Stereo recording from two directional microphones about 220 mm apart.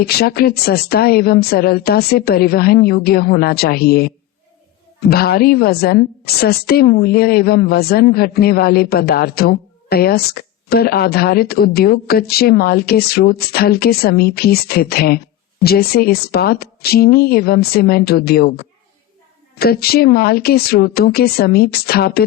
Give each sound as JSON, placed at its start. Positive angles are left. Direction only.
{"t": 0.0, "sound": "a woman's voice", "side_deg": 45}